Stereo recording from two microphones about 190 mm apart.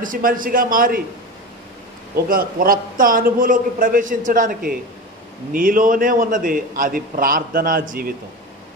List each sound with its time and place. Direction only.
0.0 s a man's voice: 45° right (ahead or behind)
2.2 s a man's voice: 50° right (ahead or behind)